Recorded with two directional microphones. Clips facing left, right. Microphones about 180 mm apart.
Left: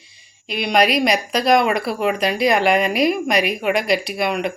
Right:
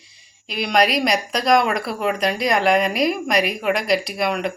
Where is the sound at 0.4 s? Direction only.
Centre (ahead or behind).